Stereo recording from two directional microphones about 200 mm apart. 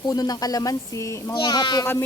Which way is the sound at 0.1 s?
20° left (ahead or behind).